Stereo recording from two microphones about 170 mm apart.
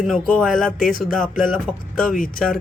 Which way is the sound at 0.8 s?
55° left (ahead or behind).